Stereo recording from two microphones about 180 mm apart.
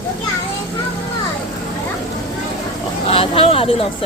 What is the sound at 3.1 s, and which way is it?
Speech, 30° left (ahead or behind).